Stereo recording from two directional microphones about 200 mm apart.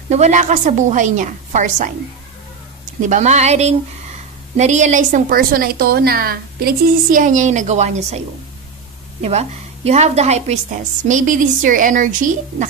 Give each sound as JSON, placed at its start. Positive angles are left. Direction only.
{"t": 0.1, "sound": "a woman's voice", "side_deg": -35}
{"t": 3.0, "sound": "a woman's voice", "side_deg": -35}
{"t": 9.2, "sound": "a woman's voice", "side_deg": -30}